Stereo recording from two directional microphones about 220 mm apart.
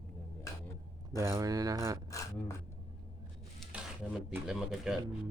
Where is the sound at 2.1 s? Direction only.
15° left (ahead or behind).